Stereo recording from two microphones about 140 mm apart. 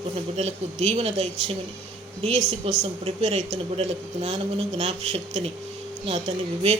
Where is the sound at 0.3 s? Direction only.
50° right (ahead or behind).